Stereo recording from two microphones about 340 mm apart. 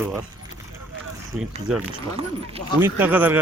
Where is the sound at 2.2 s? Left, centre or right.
Centre.